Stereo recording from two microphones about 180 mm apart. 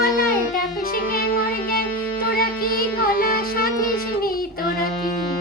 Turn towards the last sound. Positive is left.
turn(degrees=55)  # may be behind; listen again after turning